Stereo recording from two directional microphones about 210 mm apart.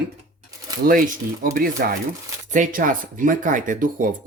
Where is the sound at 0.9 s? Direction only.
40° right (ahead or behind).